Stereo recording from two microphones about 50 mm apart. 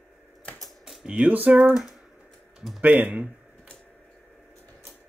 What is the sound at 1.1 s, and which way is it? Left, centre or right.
Speech, right.